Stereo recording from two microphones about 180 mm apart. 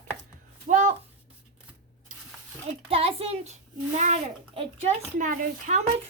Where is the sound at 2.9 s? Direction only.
30° right (ahead or behind).